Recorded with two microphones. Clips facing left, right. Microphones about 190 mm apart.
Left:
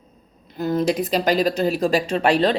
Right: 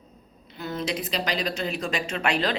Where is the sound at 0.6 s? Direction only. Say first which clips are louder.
Left 9 dB; 40° left (ahead or behind).